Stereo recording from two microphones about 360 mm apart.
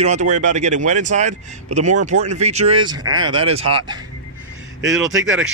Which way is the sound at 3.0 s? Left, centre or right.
Right.